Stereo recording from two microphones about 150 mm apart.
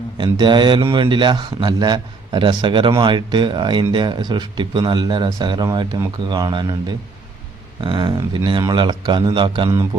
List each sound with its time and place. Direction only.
0.2 s a man's voice: 30° right (ahead or behind)